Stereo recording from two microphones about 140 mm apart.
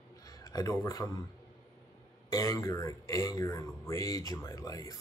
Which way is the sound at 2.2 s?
25° left (ahead or behind).